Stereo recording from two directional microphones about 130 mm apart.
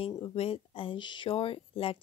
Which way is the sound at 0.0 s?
45° left (ahead or behind).